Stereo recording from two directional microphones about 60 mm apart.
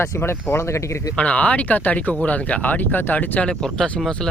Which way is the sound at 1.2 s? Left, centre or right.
Left.